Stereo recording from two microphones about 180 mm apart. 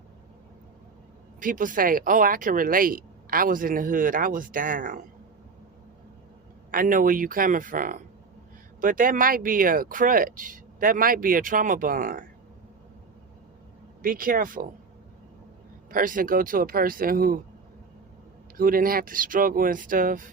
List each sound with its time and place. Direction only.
1.4 s speech: 50° right (ahead or behind)
6.7 s speech: 50° right (ahead or behind)
14.0 s speech: 50° right (ahead or behind)
15.9 s speech: 50° right (ahead or behind)
18.5 s speech: 50° right (ahead or behind)